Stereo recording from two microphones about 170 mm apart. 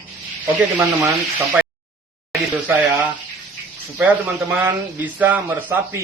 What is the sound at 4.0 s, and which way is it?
Speech, 10° right (ahead or behind).